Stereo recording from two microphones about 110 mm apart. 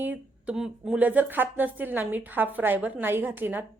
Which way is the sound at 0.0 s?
15° right (ahead or behind).